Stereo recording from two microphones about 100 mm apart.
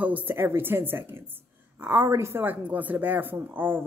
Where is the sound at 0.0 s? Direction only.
15° right (ahead or behind).